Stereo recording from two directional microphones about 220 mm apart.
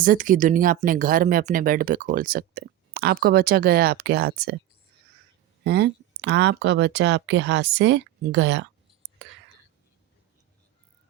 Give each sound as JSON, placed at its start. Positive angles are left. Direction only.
{"t": 0.0, "sound": "speech", "side_deg": -40}
{"t": 5.6, "sound": "speech", "side_deg": -50}